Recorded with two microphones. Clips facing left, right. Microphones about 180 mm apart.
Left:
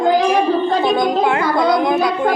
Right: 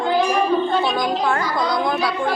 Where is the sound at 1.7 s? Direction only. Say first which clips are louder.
Left 5 dB; 20° left (ahead or behind).